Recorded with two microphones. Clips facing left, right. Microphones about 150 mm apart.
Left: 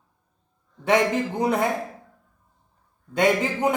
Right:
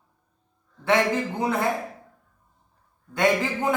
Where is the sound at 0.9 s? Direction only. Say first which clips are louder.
Left 1 dB; 20° left (ahead or behind).